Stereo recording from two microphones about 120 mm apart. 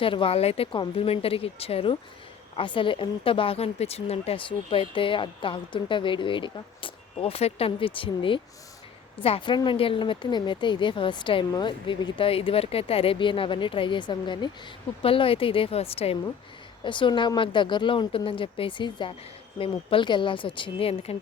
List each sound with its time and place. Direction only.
0.0 s a woman's voice: 45° left (ahead or behind)
15.0 s a woman's voice: 50° left (ahead or behind)
16.8 s a woman's voice: 40° left (ahead or behind)